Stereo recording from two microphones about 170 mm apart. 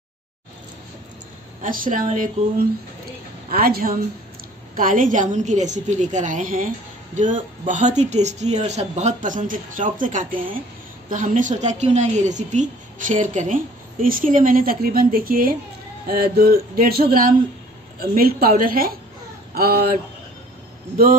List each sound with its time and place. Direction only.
1.6 s speech: 50° right (ahead or behind)
3.4 s a woman's voice: 60° right (ahead or behind)